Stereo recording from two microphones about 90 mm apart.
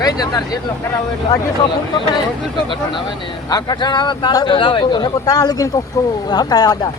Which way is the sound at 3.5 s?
50° left (ahead or behind).